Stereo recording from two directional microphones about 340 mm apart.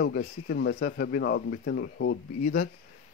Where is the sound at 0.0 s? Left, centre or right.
Left.